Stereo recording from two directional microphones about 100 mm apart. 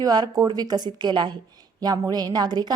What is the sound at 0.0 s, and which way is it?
A woman's voice, 40° right (ahead or behind).